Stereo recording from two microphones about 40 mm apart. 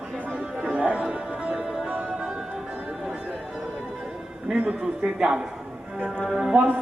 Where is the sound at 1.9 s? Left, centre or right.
Right.